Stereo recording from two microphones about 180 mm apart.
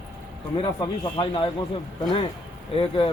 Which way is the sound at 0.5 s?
25° left (ahead or behind).